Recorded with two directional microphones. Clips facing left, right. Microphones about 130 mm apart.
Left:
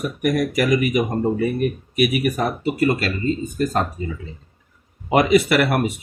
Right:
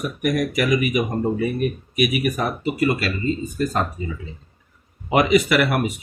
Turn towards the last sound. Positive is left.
turn(degrees=50)  # may be behind; listen again after turning